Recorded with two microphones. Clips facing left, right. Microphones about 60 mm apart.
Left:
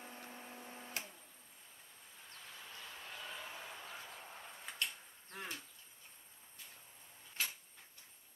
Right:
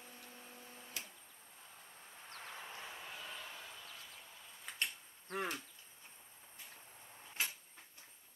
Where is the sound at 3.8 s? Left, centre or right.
Left.